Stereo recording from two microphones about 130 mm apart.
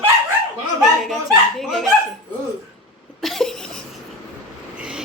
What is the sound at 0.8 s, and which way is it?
Chuckle, centre (ahead or behind).